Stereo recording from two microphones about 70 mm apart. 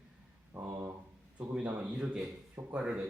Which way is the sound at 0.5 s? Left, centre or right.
Right.